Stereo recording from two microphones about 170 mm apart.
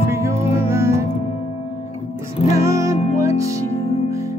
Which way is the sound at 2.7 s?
20° right (ahead or behind).